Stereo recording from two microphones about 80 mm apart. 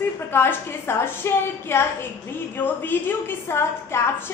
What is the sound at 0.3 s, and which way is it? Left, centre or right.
A woman's voice, left.